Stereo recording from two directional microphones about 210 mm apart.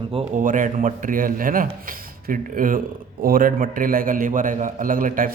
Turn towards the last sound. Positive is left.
turn(degrees=-40)  # may be behind; listen again after turning